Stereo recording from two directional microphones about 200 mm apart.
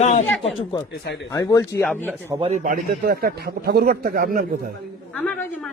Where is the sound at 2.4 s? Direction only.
35° right (ahead or behind).